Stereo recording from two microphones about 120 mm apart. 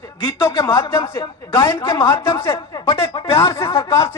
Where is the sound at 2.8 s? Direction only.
50° left (ahead or behind).